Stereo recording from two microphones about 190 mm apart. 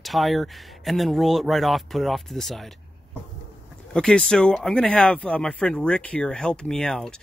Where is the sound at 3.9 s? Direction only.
5° left (ahead or behind).